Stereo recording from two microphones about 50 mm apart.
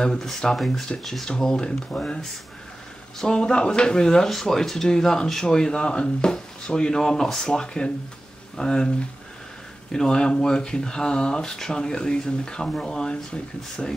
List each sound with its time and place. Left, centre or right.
0.0 s speech: centre
1.6 s speech: centre
9.9 s speech: centre